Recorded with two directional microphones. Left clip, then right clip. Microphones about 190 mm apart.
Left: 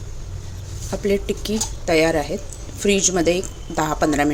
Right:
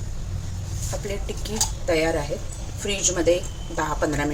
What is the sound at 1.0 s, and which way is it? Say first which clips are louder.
Speech: left 14 dB; 55° left (ahead or behind).